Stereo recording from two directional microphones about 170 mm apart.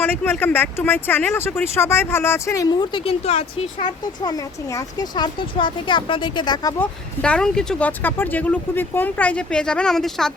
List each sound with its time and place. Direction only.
0.0 s speech: 10° left (ahead or behind); by 3.9 s 40° left (ahead or behind)
4.2 s speech: 20° left (ahead or behind)
7.2 s speech: 5° left (ahead or behind)